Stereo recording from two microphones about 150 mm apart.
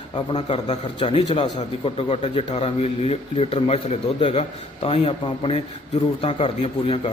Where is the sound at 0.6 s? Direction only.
45° left (ahead or behind).